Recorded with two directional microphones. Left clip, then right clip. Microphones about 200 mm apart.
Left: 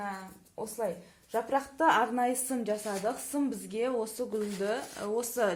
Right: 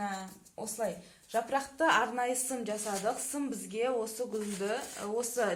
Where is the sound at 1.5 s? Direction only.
45° left (ahead or behind).